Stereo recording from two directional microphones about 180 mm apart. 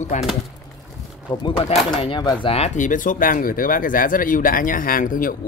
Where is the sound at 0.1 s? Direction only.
40° left (ahead or behind).